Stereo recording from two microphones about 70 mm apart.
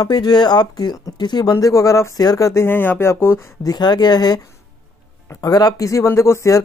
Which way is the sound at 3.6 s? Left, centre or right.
Left.